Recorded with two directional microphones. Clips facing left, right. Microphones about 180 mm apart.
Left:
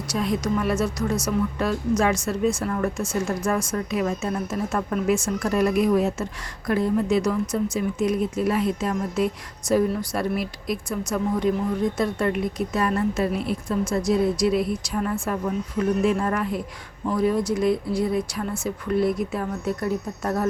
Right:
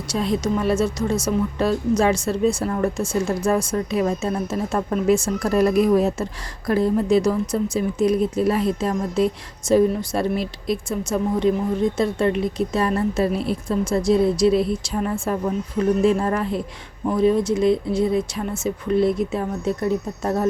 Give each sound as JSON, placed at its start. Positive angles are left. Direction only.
{"t": 0.1, "sound": "speech", "side_deg": -30}